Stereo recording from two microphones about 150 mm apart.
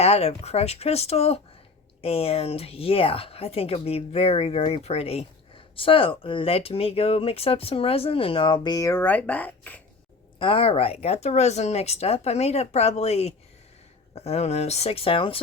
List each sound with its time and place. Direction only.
0.0 s speech: 45° left (ahead or behind); by 9.8 s 10° left (ahead or behind)
10.3 s speech: 35° left (ahead or behind)